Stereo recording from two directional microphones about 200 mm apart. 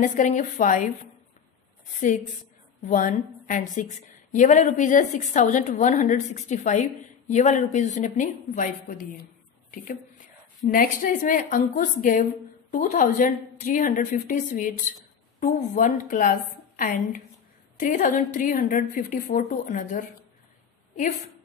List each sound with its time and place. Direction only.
0.0 s a woman's voice: 40° left (ahead or behind)
2.0 s a woman's voice: 40° left (ahead or behind)